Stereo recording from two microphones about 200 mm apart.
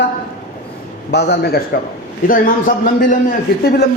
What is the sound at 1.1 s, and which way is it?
Speech, 55° left (ahead or behind).